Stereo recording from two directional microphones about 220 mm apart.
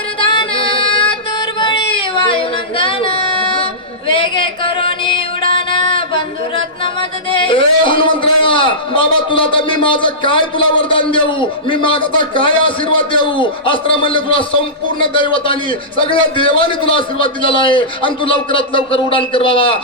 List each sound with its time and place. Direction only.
0.2 s child singing: 25° left (ahead or behind)
1.4 s a sound: 20° left (ahead or behind)
7.3 s a man's voice: 25° left (ahead or behind)